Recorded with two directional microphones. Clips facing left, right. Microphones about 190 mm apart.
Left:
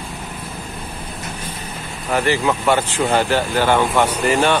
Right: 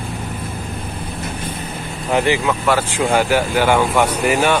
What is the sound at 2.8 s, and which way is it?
Speech, 10° right (ahead or behind).